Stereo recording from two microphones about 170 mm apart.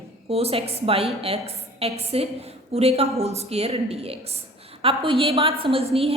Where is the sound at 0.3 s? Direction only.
35° right (ahead or behind).